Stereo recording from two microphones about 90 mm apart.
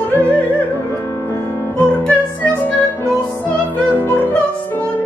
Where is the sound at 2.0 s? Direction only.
15° left (ahead or behind).